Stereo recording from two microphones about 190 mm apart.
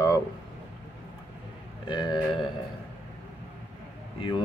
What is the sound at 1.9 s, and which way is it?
Speech, 25° left (ahead or behind).